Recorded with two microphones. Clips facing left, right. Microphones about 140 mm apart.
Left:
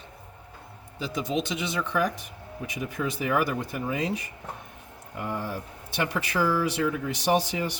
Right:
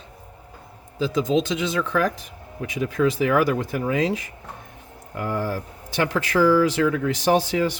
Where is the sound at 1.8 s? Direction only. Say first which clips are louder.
Right 2 dB; 90° right.